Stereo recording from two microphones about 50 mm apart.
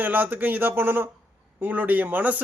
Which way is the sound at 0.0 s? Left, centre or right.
Right.